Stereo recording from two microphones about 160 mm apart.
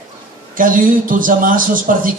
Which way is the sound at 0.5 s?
60° right (ahead or behind).